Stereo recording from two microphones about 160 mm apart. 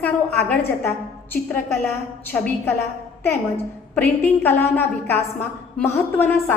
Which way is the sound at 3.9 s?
10° left (ahead or behind).